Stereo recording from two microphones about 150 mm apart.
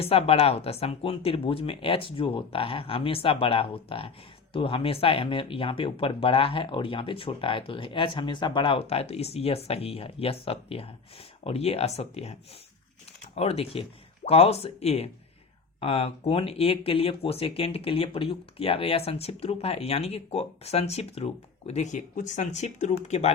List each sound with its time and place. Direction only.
0.0 s speech: 40° left (ahead or behind)